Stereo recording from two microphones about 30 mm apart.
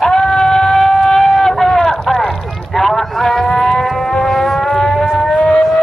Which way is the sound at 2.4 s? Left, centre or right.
Centre.